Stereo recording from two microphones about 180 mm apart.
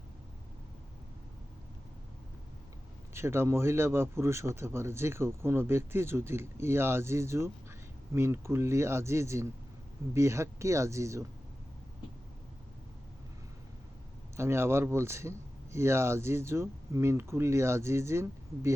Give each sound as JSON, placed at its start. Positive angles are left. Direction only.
{"t": 3.2, "sound": "speech", "side_deg": -15}
{"t": 14.3, "sound": "speech", "side_deg": -15}